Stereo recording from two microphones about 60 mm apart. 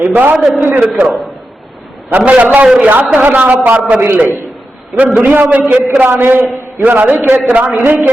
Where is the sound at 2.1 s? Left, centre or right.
Right.